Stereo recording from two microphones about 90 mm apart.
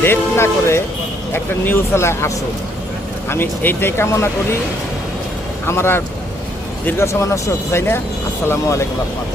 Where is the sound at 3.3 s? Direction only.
25° left (ahead or behind).